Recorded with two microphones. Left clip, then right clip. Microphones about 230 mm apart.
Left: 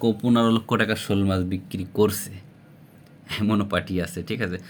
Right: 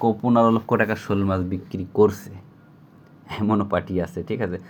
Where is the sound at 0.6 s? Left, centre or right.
Left.